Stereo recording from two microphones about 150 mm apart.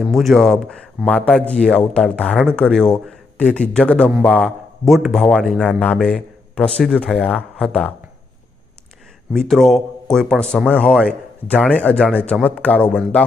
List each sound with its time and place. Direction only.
0.0 s a man's voice: centre (ahead or behind)
9.3 s a man's voice: centre (ahead or behind)